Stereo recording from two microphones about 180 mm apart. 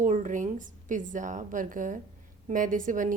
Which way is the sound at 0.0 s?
45° right (ahead or behind).